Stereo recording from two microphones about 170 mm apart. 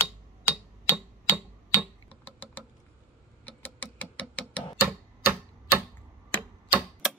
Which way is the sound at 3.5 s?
10° left (ahead or behind).